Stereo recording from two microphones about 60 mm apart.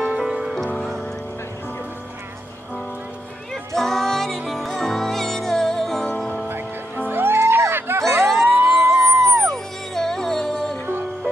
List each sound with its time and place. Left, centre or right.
0.0 s music: centre
3.7 s music: centre
6.0 s music: centre
7.1 s music: right
8.0 s a sound: right
8.5 s music: right
9.4 s music: centre